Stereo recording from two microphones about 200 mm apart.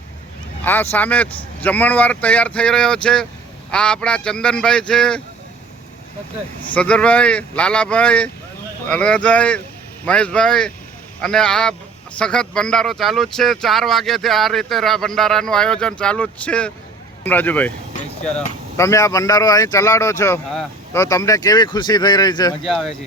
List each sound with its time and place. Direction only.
0.6 s speech: 10° left (ahead or behind)
6.7 s speech: 5° left (ahead or behind)
22.6 s speech: centre (ahead or behind)